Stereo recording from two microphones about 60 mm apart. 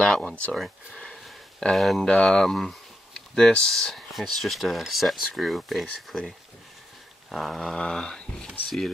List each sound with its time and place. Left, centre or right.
0.0 s speech: centre
0.9 s sniff: centre
1.6 s speech: centre
2.0 s dog: centre
3.2 s speech: centre
7.2 s dog: centre
8.6 s speech: centre